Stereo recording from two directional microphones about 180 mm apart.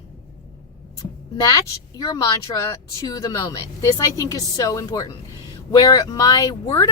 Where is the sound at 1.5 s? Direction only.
20° left (ahead or behind).